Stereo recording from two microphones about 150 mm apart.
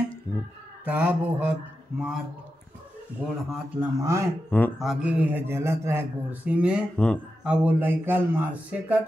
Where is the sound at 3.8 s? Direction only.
20° right (ahead or behind).